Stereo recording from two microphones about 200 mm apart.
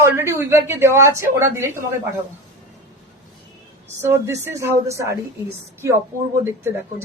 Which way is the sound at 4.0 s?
10° right (ahead or behind).